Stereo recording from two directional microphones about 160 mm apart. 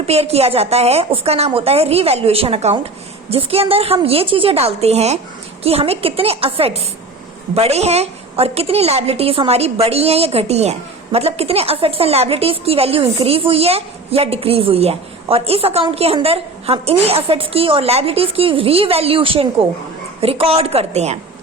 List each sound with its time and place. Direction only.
0.1 s a woman's voice: 40° right (ahead or behind)